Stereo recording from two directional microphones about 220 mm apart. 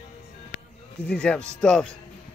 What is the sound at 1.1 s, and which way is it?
Speech, 5° left (ahead or behind).